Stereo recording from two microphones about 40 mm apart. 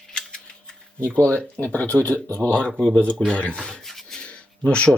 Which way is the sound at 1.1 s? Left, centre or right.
Left.